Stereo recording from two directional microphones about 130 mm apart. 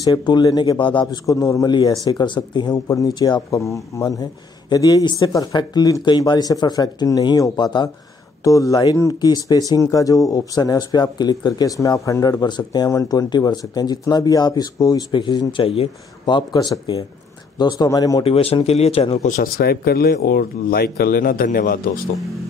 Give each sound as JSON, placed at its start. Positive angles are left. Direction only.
{"t": 0.0, "sound": "speech", "side_deg": 30}
{"t": 1.2, "sound": "speech", "side_deg": 25}
{"t": 18.2, "sound": "speech", "side_deg": 50}
{"t": 19.2, "sound": "speech", "side_deg": 75}
{"t": 21.1, "sound": "a man's voice", "side_deg": 90}